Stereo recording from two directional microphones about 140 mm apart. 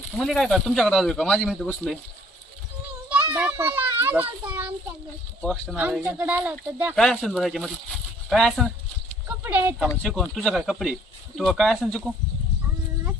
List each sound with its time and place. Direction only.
0.1 s speech: centre (ahead or behind)
3.1 s a child's voice: 10° right (ahead or behind)
6.9 s speech: 5° left (ahead or behind)
9.2 s clip-clop: 15° right (ahead or behind)
10.0 s speech: centre (ahead or behind)